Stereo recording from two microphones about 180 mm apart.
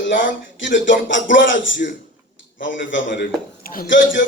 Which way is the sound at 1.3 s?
90° left.